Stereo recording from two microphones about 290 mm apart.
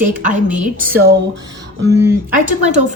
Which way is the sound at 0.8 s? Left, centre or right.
Right.